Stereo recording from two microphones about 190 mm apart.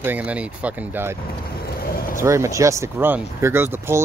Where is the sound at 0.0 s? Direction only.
10° right (ahead or behind).